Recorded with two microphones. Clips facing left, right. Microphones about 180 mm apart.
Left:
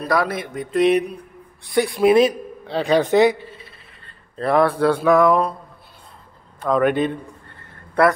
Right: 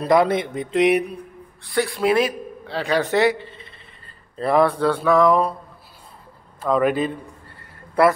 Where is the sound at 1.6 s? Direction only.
15° left (ahead or behind); by 4.8 s centre (ahead or behind).